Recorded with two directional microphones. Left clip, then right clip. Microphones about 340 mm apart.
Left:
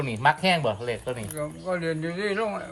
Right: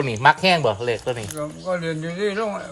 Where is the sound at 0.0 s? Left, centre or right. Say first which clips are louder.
Right 6 dB; right.